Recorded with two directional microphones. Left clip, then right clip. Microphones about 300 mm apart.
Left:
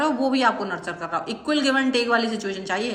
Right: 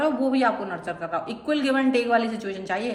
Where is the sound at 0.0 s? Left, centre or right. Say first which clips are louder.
Left 2 dB; centre.